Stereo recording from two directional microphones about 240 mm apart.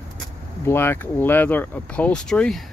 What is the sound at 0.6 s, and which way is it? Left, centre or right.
Speech, centre.